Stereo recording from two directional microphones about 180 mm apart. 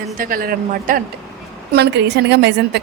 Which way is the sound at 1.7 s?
70° right (ahead or behind).